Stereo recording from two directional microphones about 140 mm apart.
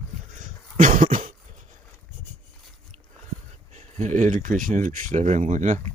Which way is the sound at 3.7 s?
55° right (ahead or behind).